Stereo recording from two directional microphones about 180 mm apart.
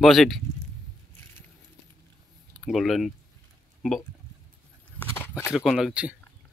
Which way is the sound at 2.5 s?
Centre (ahead or behind).